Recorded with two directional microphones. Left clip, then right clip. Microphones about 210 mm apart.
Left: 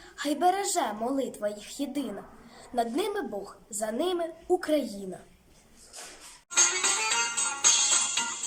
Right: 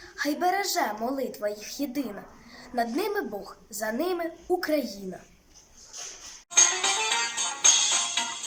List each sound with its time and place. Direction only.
0.2 s a woman's voice: centre (ahead or behind)
6.5 s music: 30° left (ahead or behind)